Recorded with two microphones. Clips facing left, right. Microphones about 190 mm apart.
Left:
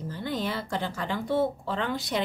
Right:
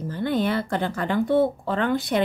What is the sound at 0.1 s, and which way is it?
Speech, 60° right (ahead or behind).